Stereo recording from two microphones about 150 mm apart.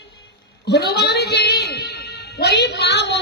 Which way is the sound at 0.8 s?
90° left.